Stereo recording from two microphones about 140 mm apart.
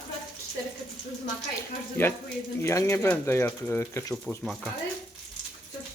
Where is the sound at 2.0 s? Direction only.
15° left (ahead or behind).